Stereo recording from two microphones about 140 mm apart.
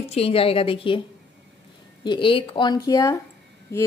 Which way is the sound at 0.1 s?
45° left (ahead or behind).